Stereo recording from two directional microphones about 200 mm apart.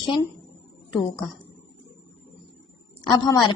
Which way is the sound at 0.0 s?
20° left (ahead or behind).